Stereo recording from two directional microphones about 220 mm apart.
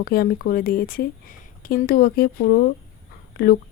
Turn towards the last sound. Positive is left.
turn(degrees=45)  # may be behind; listen again after turning